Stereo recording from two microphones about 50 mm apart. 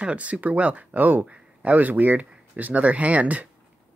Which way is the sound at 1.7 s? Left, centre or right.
Right.